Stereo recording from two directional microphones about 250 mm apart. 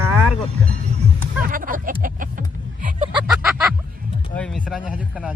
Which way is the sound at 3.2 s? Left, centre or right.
Centre.